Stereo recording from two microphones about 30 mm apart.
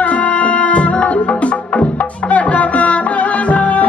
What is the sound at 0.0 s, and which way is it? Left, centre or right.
Music, left.